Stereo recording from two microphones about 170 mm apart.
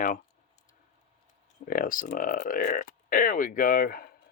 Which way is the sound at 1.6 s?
55° left (ahead or behind).